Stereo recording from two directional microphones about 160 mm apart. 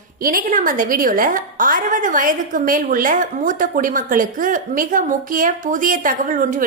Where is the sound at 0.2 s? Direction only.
60° right (ahead or behind).